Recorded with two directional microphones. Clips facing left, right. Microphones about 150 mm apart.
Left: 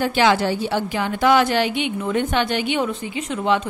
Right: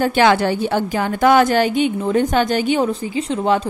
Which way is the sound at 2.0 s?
30° right (ahead or behind).